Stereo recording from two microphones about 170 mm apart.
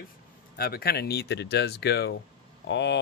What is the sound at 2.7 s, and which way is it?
Speech, 90° left.